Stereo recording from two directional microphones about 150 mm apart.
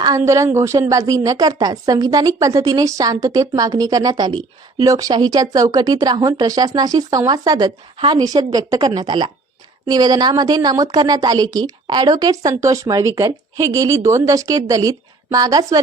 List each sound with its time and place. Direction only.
0.0 s a woman's voice: 25° right (ahead or behind)